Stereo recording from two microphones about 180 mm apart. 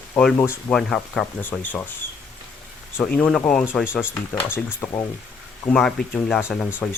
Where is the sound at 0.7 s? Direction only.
Centre (ahead or behind).